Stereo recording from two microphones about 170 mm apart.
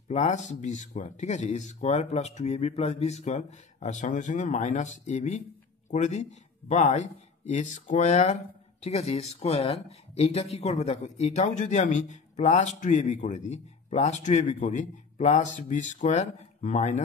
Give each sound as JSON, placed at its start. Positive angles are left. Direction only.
{"t": 0.1, "sound": "speech", "side_deg": 40}